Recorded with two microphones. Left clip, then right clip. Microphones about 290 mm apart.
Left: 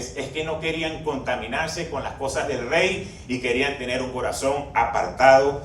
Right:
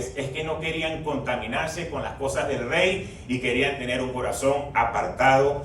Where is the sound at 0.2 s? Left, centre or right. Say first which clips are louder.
Left 3 dB; left.